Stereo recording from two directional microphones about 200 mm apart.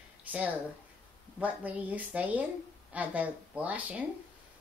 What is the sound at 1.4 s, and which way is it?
Speech, 10° right (ahead or behind).